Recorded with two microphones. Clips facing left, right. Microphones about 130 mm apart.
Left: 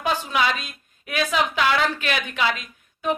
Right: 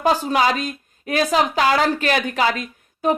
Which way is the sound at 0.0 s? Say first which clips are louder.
Right 5 dB; 40° right (ahead or behind).